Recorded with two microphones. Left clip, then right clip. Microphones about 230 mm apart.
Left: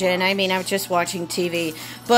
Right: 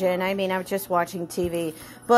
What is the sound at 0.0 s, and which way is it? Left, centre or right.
A woman's voice, centre.